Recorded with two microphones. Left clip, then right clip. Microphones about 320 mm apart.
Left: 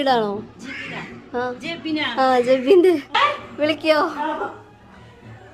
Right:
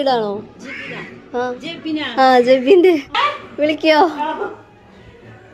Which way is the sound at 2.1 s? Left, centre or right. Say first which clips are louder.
Right 6 dB; centre.